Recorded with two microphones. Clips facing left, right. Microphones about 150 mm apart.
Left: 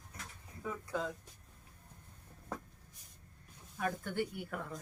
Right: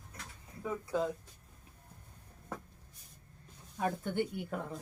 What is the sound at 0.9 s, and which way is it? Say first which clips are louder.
Speech: right 5 dB; 15° right (ahead or behind).